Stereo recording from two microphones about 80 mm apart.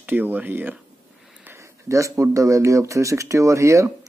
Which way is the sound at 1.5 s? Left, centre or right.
Right.